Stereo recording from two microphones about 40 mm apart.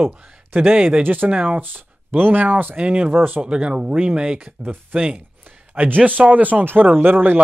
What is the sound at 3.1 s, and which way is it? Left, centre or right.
Speech, right.